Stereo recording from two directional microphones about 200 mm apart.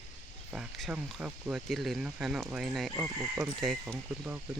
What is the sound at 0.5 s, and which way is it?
Speech, 5° right (ahead or behind).